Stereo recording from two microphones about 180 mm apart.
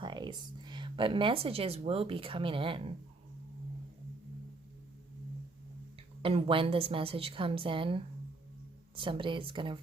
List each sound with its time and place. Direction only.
0.0 s speech: 25° right (ahead or behind)
6.2 s a woman's voice: 30° right (ahead or behind)